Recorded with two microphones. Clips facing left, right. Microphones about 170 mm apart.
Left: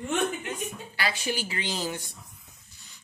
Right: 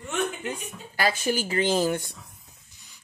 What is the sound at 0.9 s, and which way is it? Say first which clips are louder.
A woman's voice: right 6 dB; 45° right (ahead or behind).